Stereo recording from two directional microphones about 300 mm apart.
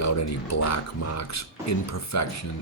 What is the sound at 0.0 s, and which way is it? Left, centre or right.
Speech, left.